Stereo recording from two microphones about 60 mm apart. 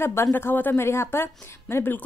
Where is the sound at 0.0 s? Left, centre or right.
Left.